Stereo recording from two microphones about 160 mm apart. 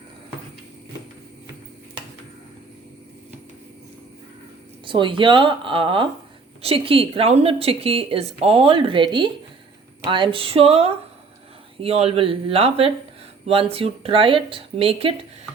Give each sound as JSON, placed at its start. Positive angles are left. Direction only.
{"t": 4.9, "sound": "a woman's voice", "side_deg": -30}